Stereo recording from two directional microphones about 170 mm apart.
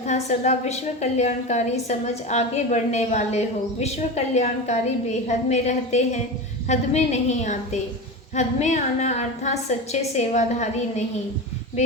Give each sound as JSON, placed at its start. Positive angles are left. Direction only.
{"t": 0.1, "sound": "a woman's voice", "side_deg": 40}